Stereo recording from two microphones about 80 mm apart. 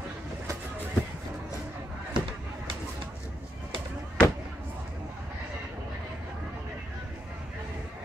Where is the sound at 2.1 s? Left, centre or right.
Right.